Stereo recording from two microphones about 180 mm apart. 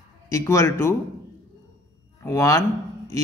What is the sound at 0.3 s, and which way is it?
Speech, 15° left (ahead or behind).